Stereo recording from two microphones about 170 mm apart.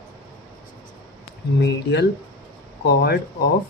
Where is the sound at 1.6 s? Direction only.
80° left.